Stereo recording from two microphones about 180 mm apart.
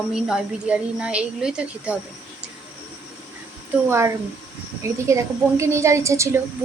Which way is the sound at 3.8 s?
15° right (ahead or behind).